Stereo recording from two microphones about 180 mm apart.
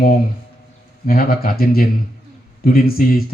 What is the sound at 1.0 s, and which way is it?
Speech, 55° left (ahead or behind).